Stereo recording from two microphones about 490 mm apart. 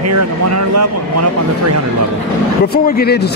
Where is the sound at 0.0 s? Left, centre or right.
Right.